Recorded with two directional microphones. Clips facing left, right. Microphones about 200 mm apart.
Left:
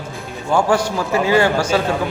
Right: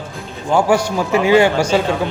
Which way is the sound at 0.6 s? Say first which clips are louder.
Right 2 dB; 10° right (ahead or behind).